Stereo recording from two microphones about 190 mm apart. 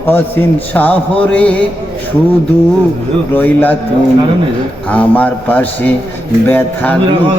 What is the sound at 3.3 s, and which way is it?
Music, 10° left (ahead or behind).